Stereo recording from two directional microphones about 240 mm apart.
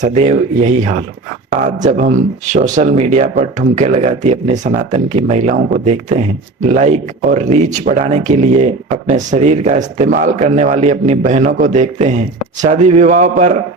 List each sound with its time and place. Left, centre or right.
0.0 s speech: right